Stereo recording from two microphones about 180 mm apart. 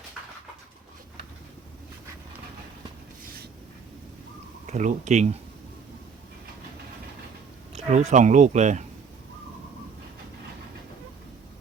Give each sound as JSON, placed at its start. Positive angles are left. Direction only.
{"t": 4.6, "sound": "speech", "side_deg": -40}
{"t": 7.9, "sound": "speech", "side_deg": -40}